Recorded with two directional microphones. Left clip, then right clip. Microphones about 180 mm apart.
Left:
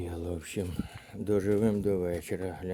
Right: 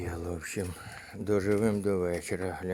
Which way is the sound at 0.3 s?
35° left (ahead or behind).